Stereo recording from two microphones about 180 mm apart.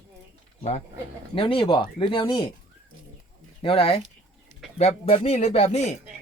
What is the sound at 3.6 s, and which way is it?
Speech, 30° left (ahead or behind).